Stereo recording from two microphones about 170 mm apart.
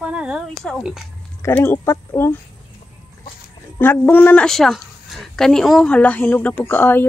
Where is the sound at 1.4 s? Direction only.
15° left (ahead or behind).